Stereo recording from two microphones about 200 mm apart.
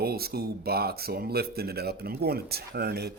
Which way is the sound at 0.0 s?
50° right (ahead or behind).